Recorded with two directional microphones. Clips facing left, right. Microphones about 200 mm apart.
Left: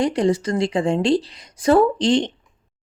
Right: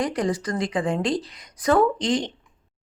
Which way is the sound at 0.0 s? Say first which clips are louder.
Left 5 dB; 25° left (ahead or behind).